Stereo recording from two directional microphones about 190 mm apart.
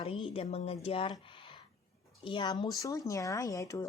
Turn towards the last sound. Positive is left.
turn(degrees=15)  # may be behind; listen again after turning